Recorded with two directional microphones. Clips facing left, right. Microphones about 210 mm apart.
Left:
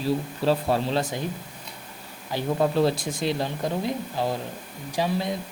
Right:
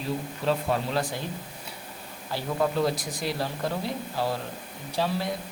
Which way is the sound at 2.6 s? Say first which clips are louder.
Left 3 dB; 30° left (ahead or behind).